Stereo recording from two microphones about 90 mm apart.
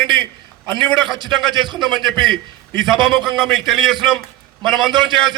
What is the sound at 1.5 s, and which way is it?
Speech, 60° right (ahead or behind).